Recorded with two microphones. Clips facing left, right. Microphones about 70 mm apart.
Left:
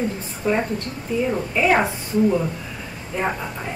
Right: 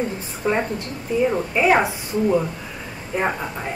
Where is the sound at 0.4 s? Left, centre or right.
Centre.